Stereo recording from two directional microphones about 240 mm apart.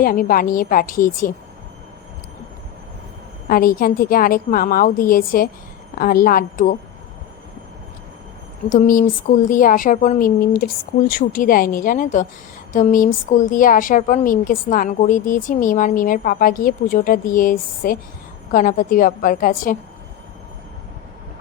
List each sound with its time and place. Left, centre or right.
0.0 s a woman's voice: left
3.5 s a woman's voice: left
8.7 s a woman's voice: left